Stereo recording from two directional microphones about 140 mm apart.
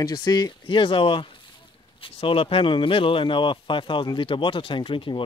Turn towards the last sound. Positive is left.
turn(degrees=35)  # may be behind; listen again after turning